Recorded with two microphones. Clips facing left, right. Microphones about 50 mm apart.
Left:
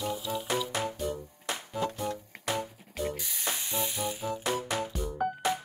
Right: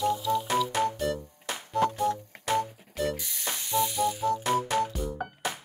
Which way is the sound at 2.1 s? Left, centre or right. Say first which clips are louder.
Right 5 dB; right.